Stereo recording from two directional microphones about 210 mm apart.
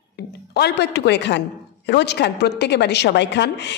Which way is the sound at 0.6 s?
55° left (ahead or behind).